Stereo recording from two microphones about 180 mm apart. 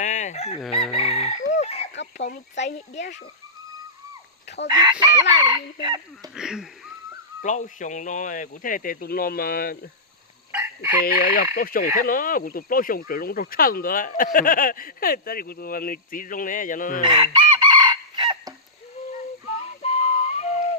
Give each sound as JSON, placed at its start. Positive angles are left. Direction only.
{"t": 0.0, "sound": "chicken", "side_deg": 40}
{"t": 0.9, "sound": "crowing", "side_deg": 35}
{"t": 1.9, "sound": "a sound", "side_deg": 80}
{"t": 2.3, "sound": "speech", "side_deg": 75}
{"t": 4.7, "sound": "speech", "side_deg": -25}
{"t": 6.3, "sound": "speech", "side_deg": -5}
{"t": 7.4, "sound": "speech", "side_deg": 45}
{"t": 10.5, "sound": "chicken", "side_deg": -15}
{"t": 11.0, "sound": "speech", "side_deg": 50}
{"t": 17.0, "sound": "chicken", "side_deg": -30}
{"t": 19.6, "sound": "whistle", "side_deg": 35}